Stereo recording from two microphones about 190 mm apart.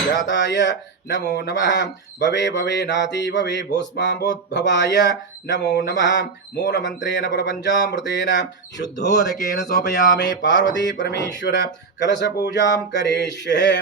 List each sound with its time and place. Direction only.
0.3 s speech: 65° left (ahead or behind)